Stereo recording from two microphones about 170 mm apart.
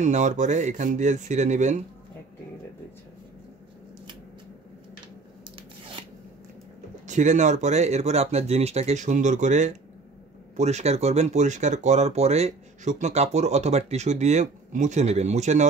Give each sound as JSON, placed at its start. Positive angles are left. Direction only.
{"t": 0.0, "sound": "speech", "side_deg": -45}
{"t": 7.1, "sound": "speech", "side_deg": -45}